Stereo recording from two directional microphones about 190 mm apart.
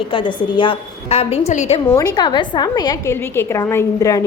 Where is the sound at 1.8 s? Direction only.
20° left (ahead or behind).